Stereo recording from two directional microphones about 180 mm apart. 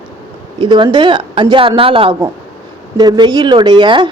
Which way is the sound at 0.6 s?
25° right (ahead or behind).